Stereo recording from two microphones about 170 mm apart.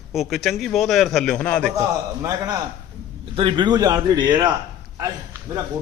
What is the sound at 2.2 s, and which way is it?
A man's voice, 20° right (ahead or behind).